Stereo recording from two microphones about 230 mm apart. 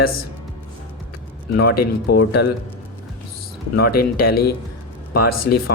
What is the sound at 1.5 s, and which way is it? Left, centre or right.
Speech, left.